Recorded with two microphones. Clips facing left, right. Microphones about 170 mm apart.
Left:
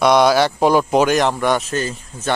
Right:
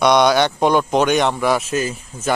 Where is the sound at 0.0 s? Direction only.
Centre (ahead or behind).